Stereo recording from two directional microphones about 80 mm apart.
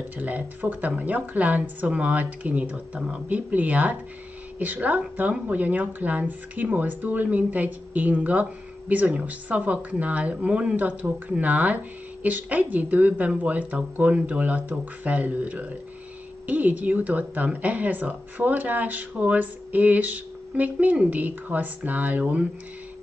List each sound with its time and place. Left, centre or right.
0.2 s speech: right